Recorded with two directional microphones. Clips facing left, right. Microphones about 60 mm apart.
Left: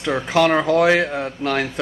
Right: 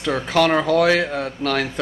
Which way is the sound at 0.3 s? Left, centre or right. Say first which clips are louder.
Left 1 dB; centre.